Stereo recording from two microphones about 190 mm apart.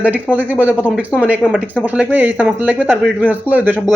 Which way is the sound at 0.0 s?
5° right (ahead or behind).